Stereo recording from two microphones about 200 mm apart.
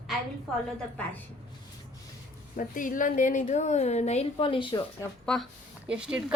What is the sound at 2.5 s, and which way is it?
A woman's voice, 40° left (ahead or behind).